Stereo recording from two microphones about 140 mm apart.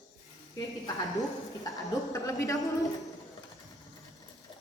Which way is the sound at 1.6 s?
25° left (ahead or behind).